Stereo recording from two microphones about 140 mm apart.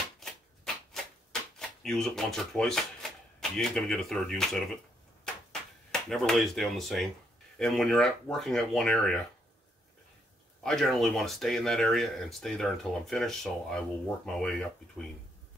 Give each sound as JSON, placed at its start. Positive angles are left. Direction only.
{"t": 1.6, "sound": "speech", "side_deg": 5}
{"t": 5.2, "sound": "a sound", "side_deg": 5}
{"t": 7.5, "sound": "speech", "side_deg": 0}
{"t": 10.6, "sound": "speech", "side_deg": 0}